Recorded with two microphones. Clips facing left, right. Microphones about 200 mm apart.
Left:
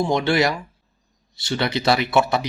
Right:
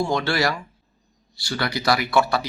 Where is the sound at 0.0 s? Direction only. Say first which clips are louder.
Left 3 dB; 20° left (ahead or behind).